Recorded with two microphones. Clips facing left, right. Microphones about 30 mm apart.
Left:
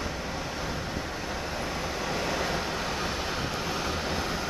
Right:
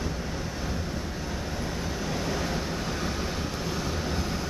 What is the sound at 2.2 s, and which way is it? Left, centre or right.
Vehicle, left.